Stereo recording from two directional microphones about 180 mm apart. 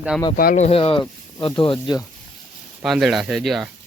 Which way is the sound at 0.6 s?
30° left (ahead or behind).